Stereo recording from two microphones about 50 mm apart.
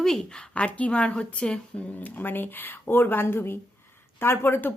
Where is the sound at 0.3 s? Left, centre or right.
Left.